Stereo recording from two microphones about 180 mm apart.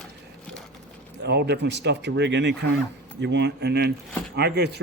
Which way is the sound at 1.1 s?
70° right (ahead or behind).